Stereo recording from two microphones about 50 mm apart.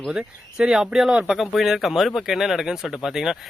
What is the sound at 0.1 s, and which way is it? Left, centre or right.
Speech, centre.